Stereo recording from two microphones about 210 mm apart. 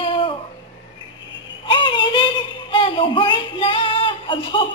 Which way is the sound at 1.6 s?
25° left (ahead or behind).